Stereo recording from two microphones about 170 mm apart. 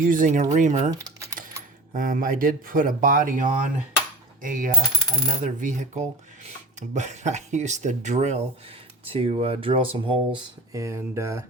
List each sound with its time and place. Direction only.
0.0 s speech: 55° right (ahead or behind); by 10.4 s 30° right (ahead or behind)
10.7 s speech: 15° right (ahead or behind)